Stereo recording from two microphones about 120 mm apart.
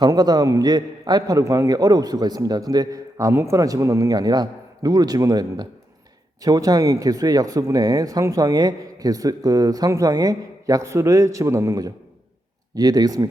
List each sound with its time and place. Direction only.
0.0 s a man's voice: 35° right (ahead or behind)